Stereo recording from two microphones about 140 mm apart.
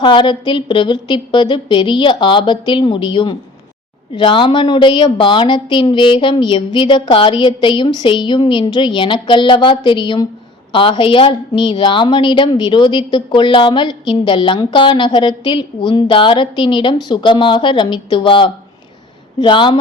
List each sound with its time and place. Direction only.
0.0 s a woman's voice: 35° left (ahead or behind)